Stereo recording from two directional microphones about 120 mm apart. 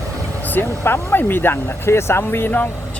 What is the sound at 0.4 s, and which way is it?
Speech, 15° left (ahead or behind).